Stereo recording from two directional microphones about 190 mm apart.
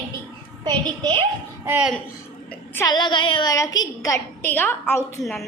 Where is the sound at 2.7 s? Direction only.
15° left (ahead or behind).